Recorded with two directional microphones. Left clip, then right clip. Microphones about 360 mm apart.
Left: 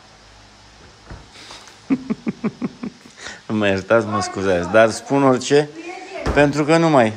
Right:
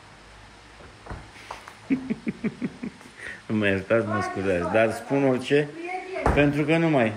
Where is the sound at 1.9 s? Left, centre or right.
Left.